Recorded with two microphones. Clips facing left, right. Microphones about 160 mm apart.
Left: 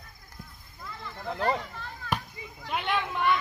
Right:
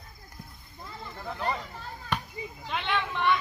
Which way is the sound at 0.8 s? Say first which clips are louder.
Even; 30° right (ahead or behind).